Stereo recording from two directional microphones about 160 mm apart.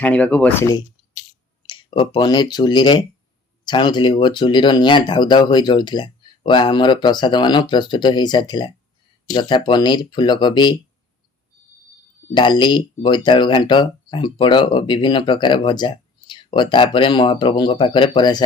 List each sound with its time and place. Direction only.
0.0 s speech: 10° left (ahead or behind)
1.6 s speech: 30° left (ahead or behind)
12.3 s speech: 30° left (ahead or behind)